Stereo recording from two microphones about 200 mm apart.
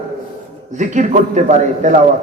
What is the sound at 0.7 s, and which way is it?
A man's voice, 40° right (ahead or behind).